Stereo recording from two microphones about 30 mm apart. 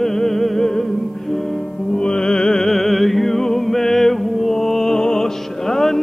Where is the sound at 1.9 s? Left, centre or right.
Left.